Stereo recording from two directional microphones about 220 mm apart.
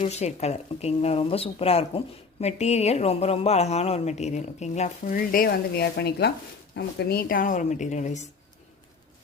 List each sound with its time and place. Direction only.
0.0 s a woman's voice: 30° left (ahead or behind)